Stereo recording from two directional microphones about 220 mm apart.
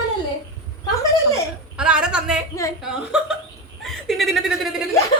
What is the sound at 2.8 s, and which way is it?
Speech, 5° right (ahead or behind).